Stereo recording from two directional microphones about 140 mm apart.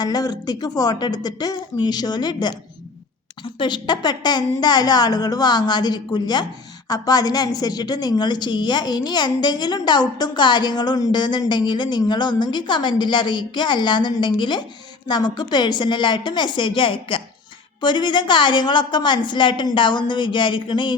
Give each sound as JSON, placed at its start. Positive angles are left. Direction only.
{"t": 0.0, "sound": "a woman's voice", "side_deg": 30}